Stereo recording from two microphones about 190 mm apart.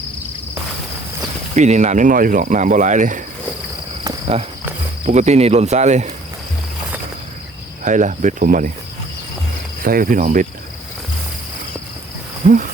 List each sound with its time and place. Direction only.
1.5 s speech: 40° right (ahead or behind)
5.0 s speech: 35° right (ahead or behind)
7.9 s speech: 40° right (ahead or behind)
9.8 s cricket: 50° right (ahead or behind)
12.4 s speech: 40° right (ahead or behind)